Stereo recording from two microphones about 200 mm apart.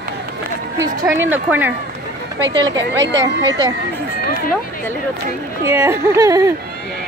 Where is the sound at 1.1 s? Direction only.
10° right (ahead or behind).